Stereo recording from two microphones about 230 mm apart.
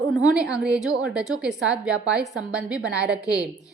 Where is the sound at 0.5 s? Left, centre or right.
Centre.